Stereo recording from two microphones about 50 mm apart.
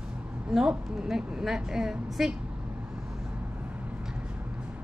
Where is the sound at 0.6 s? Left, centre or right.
Centre.